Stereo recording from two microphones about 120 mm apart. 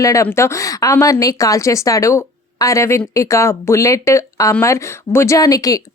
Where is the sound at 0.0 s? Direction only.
25° left (ahead or behind).